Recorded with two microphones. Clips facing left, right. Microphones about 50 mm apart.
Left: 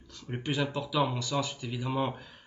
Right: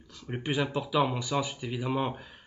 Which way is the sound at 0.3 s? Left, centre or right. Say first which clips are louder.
Right 2 dB; centre.